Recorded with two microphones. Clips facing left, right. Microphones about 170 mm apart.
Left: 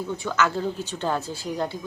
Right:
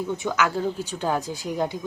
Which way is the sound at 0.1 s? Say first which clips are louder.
Left 1 dB; 15° right (ahead or behind).